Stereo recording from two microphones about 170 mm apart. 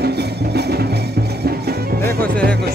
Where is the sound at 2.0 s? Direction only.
10° left (ahead or behind).